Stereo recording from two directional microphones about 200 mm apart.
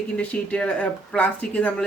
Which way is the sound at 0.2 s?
5° left (ahead or behind).